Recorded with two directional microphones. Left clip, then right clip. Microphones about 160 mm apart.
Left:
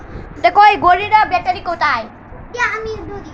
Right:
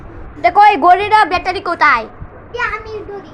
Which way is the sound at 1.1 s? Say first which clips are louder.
Right 1 dB; 90° right.